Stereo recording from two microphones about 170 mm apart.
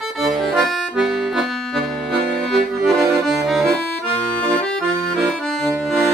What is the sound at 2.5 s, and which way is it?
Accordion, centre (ahead or behind).